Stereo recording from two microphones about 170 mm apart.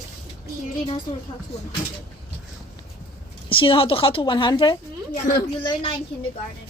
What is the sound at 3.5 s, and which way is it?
A woman's voice, 30° left (ahead or behind).